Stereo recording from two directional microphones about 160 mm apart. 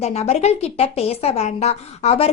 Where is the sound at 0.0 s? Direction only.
40° left (ahead or behind).